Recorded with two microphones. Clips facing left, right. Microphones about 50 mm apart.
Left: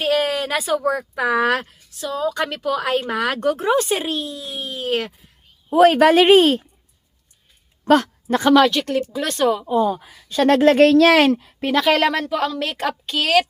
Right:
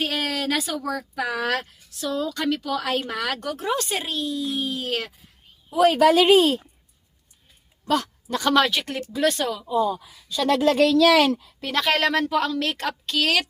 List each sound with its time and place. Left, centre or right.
0.0 s speech: centre
2.0 s speech: centre
5.7 s a woman's voice: left
7.9 s a woman's voice: left
8.5 s a woman's voice: centre
9.5 s a woman's voice: left
10.0 s speech: left
11.7 s a woman's voice: centre